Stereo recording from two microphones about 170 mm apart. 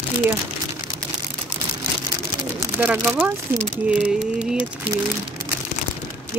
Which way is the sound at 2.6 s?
10° right (ahead or behind).